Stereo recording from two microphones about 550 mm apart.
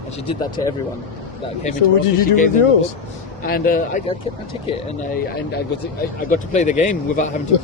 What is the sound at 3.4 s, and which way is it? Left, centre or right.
Speech, centre.